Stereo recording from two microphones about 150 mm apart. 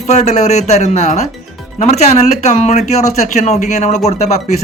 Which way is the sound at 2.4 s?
50° left (ahead or behind).